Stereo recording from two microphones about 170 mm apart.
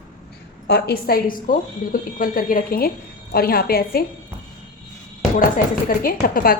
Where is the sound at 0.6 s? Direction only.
70° left (ahead or behind).